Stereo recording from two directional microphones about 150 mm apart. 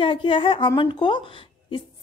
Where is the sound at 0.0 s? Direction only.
35° left (ahead or behind).